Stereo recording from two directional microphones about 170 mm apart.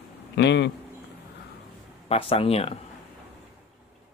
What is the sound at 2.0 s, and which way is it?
Speech, 35° left (ahead or behind).